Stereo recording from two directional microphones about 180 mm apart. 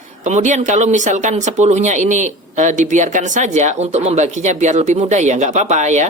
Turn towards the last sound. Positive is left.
turn(degrees=-40)  # may be behind; listen again after turning